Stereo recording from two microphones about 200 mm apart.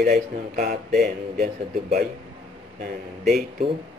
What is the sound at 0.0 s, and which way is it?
Speech, 45° right (ahead or behind).